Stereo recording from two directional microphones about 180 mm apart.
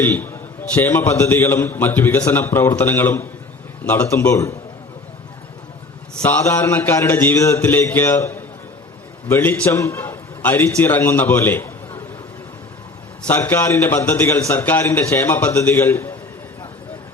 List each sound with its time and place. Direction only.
0.0 s a man's voice: 10° left (ahead or behind)
6.2 s a man's voice: 10° left (ahead or behind)
13.2 s a man's voice: 10° left (ahead or behind)